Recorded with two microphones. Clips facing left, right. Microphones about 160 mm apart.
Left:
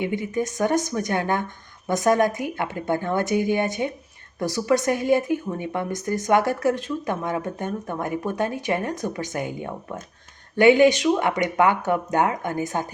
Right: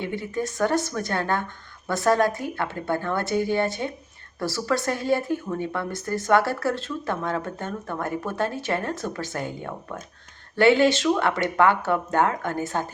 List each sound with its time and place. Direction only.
0.0 s a woman's voice: 15° left (ahead or behind)